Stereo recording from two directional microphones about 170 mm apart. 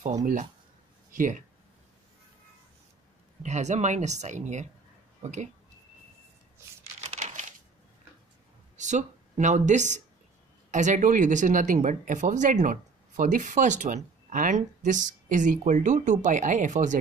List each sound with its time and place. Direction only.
0.2 s speech: 50° right (ahead or behind)
3.4 s speech: 45° right (ahead or behind)
7.0 s crumpling: 40° right (ahead or behind)
8.7 s speech: 45° right (ahead or behind)